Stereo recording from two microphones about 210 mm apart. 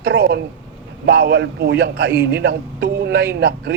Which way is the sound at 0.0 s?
55° right (ahead or behind).